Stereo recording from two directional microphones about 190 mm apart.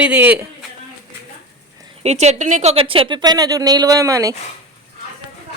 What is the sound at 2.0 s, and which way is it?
Speech, 35° right (ahead or behind).